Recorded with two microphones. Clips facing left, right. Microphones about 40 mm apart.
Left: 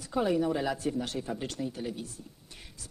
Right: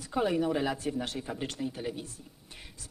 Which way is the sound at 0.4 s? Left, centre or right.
Centre.